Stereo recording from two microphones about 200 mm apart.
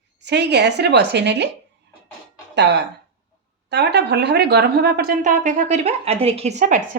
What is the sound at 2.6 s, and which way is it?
A woman's voice, 60° right (ahead or behind).